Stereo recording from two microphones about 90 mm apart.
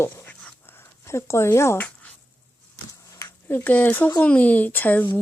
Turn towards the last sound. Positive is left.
turn(degrees=20)  # may be behind; listen again after turning